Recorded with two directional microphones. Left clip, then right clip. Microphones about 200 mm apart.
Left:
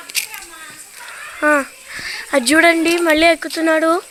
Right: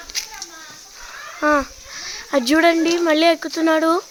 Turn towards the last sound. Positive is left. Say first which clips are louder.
# left 2 dB
turn(degrees=-5)  # may be behind; listen again after turning